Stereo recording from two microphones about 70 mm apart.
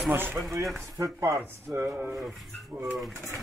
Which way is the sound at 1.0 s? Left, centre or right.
Right.